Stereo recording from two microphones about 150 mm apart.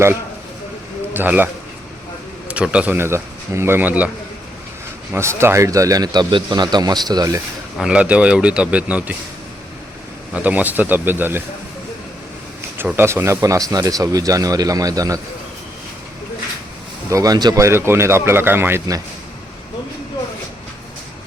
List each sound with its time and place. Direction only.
1.1 s a man's voice: 15° right (ahead or behind)
2.5 s speech: 10° right (ahead or behind)
5.1 s speech: 15° right (ahead or behind)
7.8 s speech: 5° right (ahead or behind)
10.3 s speech: 10° right (ahead or behind)
12.7 s speech: 15° right (ahead or behind)
17.1 s speech: 25° right (ahead or behind)